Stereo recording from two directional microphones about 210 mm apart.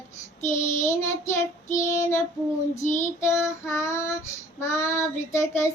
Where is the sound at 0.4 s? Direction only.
35° left (ahead or behind).